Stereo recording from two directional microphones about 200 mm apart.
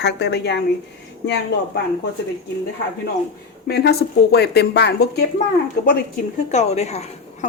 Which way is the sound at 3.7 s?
55° left (ahead or behind).